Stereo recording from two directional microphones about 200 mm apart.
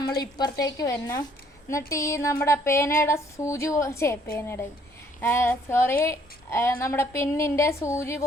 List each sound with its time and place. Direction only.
0.0 s a woman's voice: 20° left (ahead or behind)